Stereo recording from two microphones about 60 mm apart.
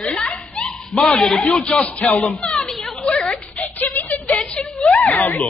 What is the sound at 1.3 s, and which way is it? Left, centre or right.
Speech, centre.